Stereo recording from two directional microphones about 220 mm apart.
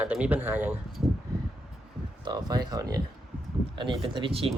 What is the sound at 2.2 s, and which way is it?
Speech, 20° right (ahead or behind).